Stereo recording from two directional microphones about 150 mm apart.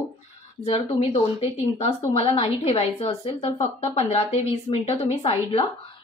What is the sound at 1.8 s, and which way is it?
Speech, 40° left (ahead or behind).